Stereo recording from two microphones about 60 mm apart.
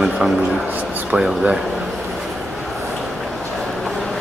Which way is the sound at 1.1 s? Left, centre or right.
Centre.